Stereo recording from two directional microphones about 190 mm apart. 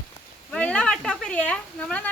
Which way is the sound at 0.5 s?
5° left (ahead or behind).